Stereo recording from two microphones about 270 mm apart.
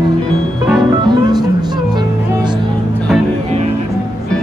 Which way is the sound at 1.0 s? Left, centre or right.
Centre.